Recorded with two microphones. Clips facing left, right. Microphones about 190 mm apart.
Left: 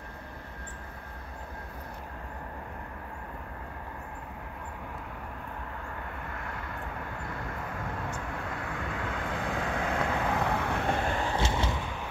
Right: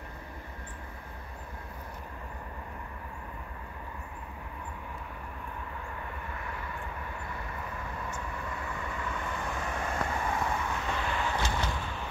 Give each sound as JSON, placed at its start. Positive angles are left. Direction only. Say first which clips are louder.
{"t": 6.4, "sound": "vehicle", "louder": "left 1 dB", "side_deg": 60}
{"t": 8.6, "sound": "vehicle", "louder": "left 2 dB", "side_deg": 90}
{"t": 11.2, "sound": "a sound", "louder": "left 2 dB", "side_deg": 25}